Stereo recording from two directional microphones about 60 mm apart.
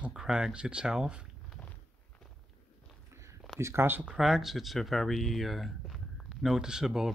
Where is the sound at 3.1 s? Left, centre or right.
Right.